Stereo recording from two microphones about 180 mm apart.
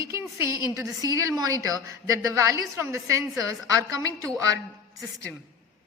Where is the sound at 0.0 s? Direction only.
15° right (ahead or behind).